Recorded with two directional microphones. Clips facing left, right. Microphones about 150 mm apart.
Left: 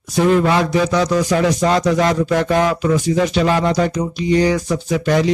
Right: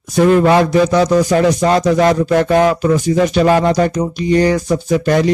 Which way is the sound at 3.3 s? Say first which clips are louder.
Right 4 dB; 50° right (ahead or behind).